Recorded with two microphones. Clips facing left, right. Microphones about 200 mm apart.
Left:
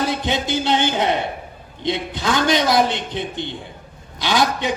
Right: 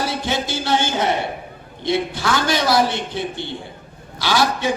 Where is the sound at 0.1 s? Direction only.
20° left (ahead or behind).